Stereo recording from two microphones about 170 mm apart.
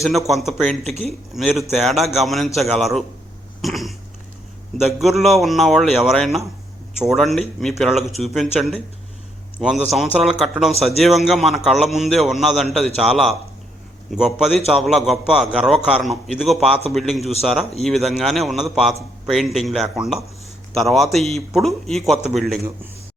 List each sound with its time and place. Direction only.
0.9 s speech: 40° right (ahead or behind)
1.3 s a man's voice: centre (ahead or behind)
3.6 s cat: centre (ahead or behind)
4.9 s a man's voice: centre (ahead or behind)